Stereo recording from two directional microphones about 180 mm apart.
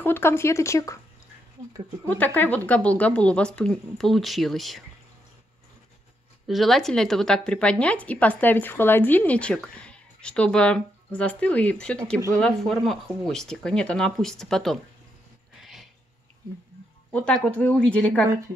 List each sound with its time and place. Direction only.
0.0 s a woman's voice: 10° left (ahead or behind)
2.0 s a woman's voice: 10° left (ahead or behind)
6.4 s a woman's voice: centre (ahead or behind)
15.6 s a sound: centre (ahead or behind)
17.1 s a woman's voice: 5° left (ahead or behind)